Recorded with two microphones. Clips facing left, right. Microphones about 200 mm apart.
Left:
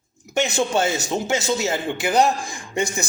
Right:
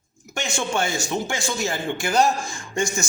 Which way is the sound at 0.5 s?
20° left (ahead or behind).